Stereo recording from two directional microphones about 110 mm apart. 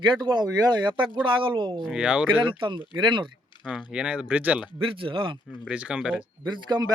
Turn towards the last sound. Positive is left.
turn(degrees=-40)  # may be behind; listen again after turning